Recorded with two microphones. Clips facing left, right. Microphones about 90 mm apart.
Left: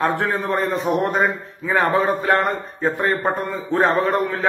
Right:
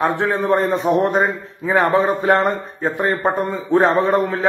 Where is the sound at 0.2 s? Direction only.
25° right (ahead or behind).